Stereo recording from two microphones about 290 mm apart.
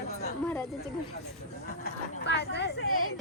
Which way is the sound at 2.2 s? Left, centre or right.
Left.